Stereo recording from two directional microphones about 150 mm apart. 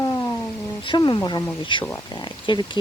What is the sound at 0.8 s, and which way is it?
Speech, 30° left (ahead or behind).